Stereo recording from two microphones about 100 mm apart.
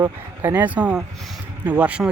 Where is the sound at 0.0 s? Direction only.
20° right (ahead or behind).